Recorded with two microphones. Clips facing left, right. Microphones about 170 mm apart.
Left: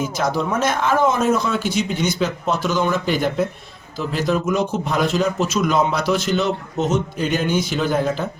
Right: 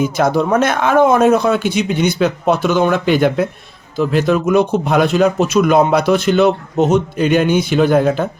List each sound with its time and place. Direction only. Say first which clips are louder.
0.0 s a man's voice: right 7 dB; 60° right (ahead or behind)